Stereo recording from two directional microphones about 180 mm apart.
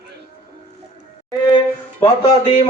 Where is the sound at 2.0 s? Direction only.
30° left (ahead or behind).